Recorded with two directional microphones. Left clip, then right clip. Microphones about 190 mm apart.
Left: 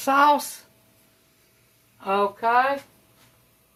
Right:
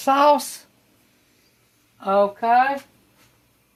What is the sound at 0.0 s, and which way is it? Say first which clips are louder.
Speech: right 2 dB; 45° right (ahead or behind).